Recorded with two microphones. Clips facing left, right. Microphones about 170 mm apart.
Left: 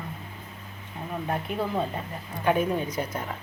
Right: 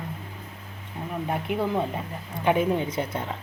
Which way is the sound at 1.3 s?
15° right (ahead or behind).